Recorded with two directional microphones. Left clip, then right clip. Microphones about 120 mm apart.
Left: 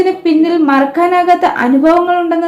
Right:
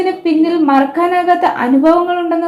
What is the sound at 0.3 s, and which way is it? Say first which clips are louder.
A woman's voice: even; 20° right (ahead or behind).